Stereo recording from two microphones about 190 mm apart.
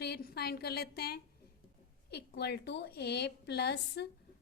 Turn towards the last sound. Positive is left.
turn(degrees=60)  # may be behind; listen again after turning